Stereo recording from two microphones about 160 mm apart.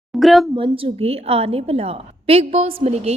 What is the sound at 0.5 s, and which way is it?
A woman's voice, 35° right (ahead or behind).